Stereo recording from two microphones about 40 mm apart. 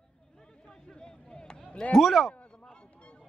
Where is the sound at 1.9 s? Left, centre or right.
Centre.